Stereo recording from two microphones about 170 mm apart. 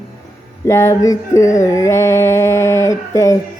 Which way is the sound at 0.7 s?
15° left (ahead or behind).